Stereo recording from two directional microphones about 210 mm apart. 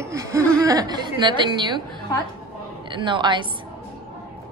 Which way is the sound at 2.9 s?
20° right (ahead or behind).